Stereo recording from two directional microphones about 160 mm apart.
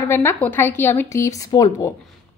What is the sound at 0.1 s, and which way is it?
A woman's voice, 15° left (ahead or behind).